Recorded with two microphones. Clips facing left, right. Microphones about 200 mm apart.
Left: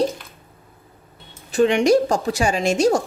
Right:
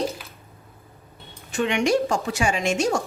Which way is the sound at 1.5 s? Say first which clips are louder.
Left 6 dB; 35° left (ahead or behind).